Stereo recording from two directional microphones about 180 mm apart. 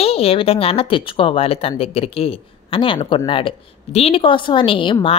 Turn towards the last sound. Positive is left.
turn(degrees=30)  # may be behind; listen again after turning